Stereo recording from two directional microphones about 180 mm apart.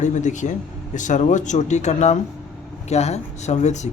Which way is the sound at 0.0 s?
45° left (ahead or behind).